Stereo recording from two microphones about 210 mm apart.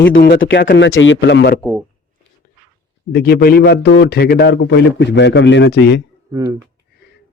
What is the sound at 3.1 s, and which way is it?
A man's voice, 50° left (ahead or behind).